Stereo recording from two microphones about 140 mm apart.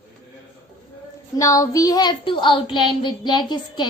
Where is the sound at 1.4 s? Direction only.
25° left (ahead or behind).